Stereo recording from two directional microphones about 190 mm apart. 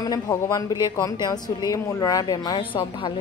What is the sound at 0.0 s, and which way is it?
A woman's voice, 20° left (ahead or behind).